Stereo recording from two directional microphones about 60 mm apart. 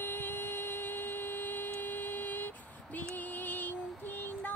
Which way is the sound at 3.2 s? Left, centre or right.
Left.